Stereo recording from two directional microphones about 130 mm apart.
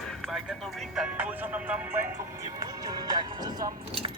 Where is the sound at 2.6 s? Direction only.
30° right (ahead or behind).